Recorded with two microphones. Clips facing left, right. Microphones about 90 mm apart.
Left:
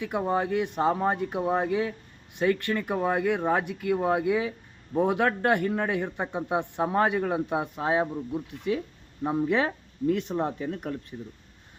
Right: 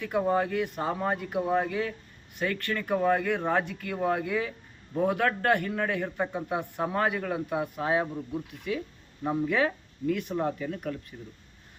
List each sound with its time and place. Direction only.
0.0 s a man's voice: 20° left (ahead or behind)